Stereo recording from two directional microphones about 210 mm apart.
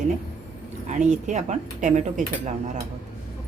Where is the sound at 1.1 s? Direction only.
35° right (ahead or behind).